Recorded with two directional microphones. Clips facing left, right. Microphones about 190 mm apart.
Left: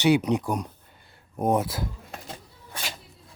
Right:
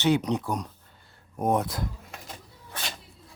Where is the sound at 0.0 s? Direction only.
10° left (ahead or behind).